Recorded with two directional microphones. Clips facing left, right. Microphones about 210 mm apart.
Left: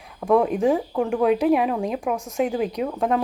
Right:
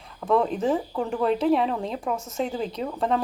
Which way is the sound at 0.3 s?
15° left (ahead or behind).